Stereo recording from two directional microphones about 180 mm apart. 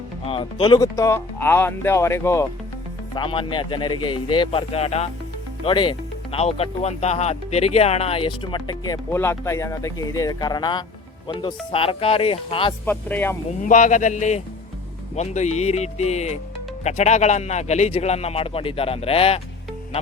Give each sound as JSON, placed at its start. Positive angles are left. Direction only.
{"t": 0.3, "sound": "speech", "side_deg": 25}
{"t": 3.2, "sound": "a man's voice", "side_deg": 30}
{"t": 12.8, "sound": "speech", "side_deg": 10}
{"t": 13.6, "sound": "a man's voice", "side_deg": 45}